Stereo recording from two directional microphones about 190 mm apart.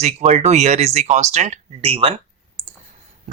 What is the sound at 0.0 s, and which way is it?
Speech, 35° right (ahead or behind).